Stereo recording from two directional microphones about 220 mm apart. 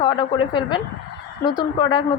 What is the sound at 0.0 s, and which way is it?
A woman's voice, 20° left (ahead or behind).